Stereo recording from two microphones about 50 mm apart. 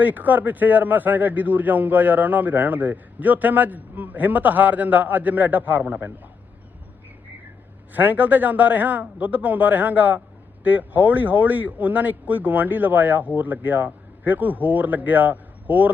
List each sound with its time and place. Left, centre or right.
0.0 s a man's voice: right
7.9 s a man's voice: right